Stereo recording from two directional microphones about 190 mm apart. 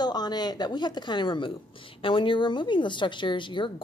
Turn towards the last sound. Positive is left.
turn(degrees=25)  # may be behind; listen again after turning